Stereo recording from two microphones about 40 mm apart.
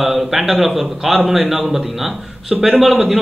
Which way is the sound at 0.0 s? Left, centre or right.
Centre.